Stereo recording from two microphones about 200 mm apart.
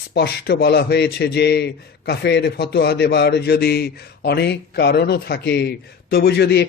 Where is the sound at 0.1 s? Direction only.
55° left (ahead or behind).